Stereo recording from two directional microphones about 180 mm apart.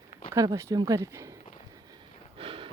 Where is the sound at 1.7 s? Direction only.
20° right (ahead or behind).